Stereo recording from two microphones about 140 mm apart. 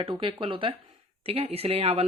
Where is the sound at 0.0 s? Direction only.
40° right (ahead or behind).